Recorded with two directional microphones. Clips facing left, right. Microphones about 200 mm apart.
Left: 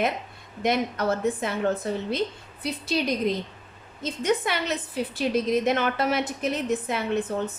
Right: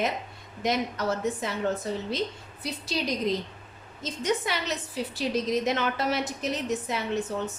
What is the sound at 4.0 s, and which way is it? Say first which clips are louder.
A woman's voice: left 3 dB; 60° left (ahead or behind).